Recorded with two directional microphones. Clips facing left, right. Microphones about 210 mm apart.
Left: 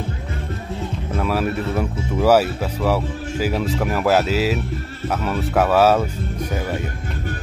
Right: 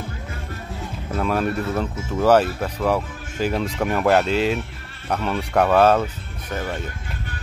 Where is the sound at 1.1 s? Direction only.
5° left (ahead or behind).